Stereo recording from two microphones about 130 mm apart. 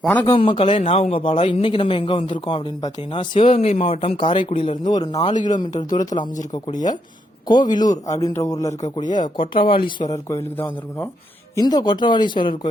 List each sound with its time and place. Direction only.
0.3 s speech: 45° left (ahead or behind)
4.8 s speech: 30° left (ahead or behind)
5.3 s speech: 70° left (ahead or behind)
6.5 s speech: 30° left (ahead or behind)
9.2 s speech: 40° left (ahead or behind)
10.1 s speech: 20° left (ahead or behind)
11.5 s speech: 30° left (ahead or behind)